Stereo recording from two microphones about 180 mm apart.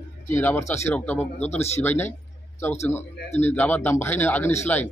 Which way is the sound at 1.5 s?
35° left (ahead or behind).